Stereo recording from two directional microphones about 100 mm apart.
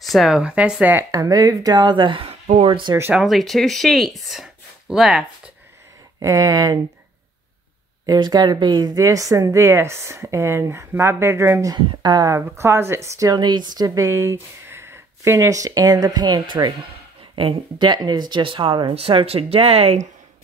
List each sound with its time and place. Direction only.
0.0 s speech: centre (ahead or behind)
1.1 s speech: 35° right (ahead or behind); by 2.8 s 80° right
3.3 s speech: centre (ahead or behind)
6.1 s a woman's voice: 30° right (ahead or behind)
8.1 s speech: 40° right (ahead or behind); by 11.7 s 25° right (ahead or behind)
11.9 s speech: 45° right (ahead or behind)
12.3 s a woman's voice: 25° right (ahead or behind)
17.4 s speech: 55° right (ahead or behind)
18.9 s speech: 75° right (ahead or behind)